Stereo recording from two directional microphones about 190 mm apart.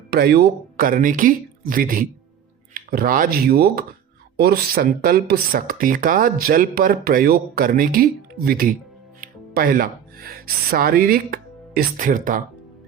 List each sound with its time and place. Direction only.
0.1 s speech: 55° right (ahead or behind)